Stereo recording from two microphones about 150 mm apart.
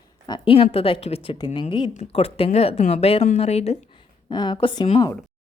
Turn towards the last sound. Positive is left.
turn(degrees=35)  # may be behind; listen again after turning